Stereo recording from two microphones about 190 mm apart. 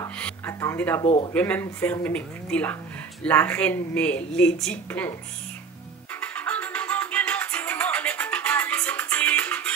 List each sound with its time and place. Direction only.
0.2 s music: 15° left (ahead or behind)
1.0 s speech: 30° left (ahead or behind)
1.3 s a woman's voice: 10° left (ahead or behind)
6.2 s music: 5° left (ahead or behind)